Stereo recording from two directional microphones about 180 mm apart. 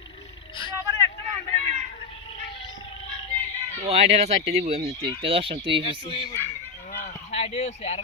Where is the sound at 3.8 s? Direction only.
35° right (ahead or behind).